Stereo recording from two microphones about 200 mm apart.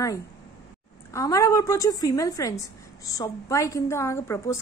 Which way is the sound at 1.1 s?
15° left (ahead or behind).